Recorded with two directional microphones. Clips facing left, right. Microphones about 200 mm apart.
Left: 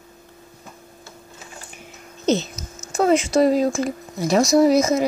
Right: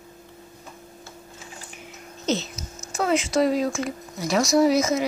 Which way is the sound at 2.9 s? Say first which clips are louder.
Left 5 dB; 40° left (ahead or behind).